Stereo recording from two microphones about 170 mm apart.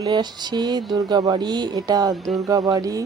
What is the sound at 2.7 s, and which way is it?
Speech, 20° right (ahead or behind).